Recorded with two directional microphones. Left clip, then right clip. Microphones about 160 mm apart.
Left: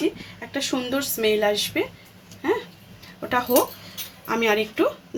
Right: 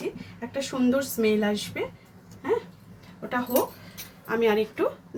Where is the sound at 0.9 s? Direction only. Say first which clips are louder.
Even; 45° left (ahead or behind).